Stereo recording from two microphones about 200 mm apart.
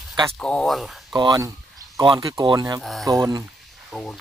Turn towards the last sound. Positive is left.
turn(degrees=5)  # may be behind; listen again after turning